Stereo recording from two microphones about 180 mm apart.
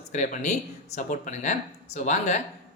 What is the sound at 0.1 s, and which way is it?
A man's voice, 45° left (ahead or behind).